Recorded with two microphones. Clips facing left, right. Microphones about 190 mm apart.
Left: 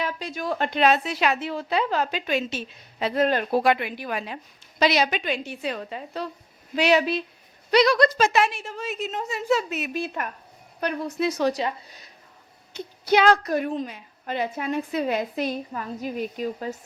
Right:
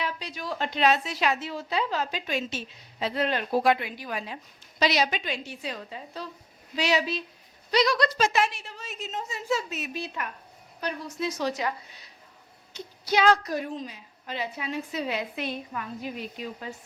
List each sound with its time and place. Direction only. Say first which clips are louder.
0.0 s a woman's voice: left 5 dB; 50° left (ahead or behind); by 2.6 s 65° left (ahead or behind)
3.0 s a woman's voice: left 5 dB; 45° left (ahead or behind)
3.5 s a woman's voice: left 2 dB; 65° left (ahead or behind); by 8.3 s 50° left (ahead or behind)
8.3 s a woman's voice: left 4 dB; 60° left (ahead or behind)
12.7 s a woman's voice: left 5 dB; 60° left (ahead or behind)